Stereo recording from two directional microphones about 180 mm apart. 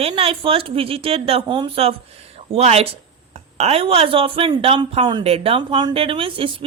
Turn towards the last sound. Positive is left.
turn(degrees=-30)  # may be behind; listen again after turning